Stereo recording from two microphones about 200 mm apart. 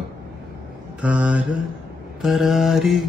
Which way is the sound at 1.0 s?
5° right (ahead or behind).